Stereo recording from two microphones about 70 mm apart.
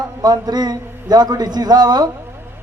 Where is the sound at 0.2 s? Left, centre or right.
Right.